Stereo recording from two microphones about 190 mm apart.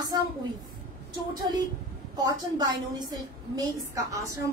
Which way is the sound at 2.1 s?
20° right (ahead or behind).